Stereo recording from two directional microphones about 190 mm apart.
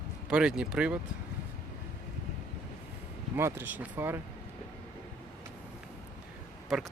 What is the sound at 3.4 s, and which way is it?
Speech, 15° right (ahead or behind).